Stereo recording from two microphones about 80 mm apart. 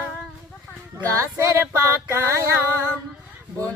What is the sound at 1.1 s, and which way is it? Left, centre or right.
Music, right.